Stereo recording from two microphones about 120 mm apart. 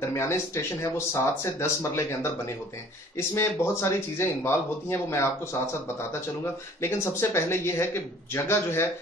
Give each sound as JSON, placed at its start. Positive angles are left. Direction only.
{"t": 0.1, "sound": "speech", "side_deg": 25}
{"t": 6.8, "sound": "speech", "side_deg": 20}